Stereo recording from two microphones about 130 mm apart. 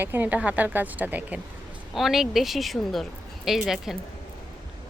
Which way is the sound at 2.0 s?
Centre (ahead or behind).